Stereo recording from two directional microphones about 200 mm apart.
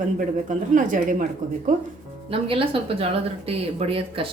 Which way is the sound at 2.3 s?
30° right (ahead or behind).